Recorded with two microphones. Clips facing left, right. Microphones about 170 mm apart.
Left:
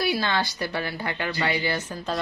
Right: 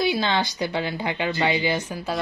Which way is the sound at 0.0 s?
20° right (ahead or behind).